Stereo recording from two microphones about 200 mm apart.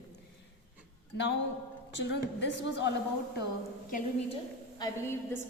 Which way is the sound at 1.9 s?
60° left (ahead or behind).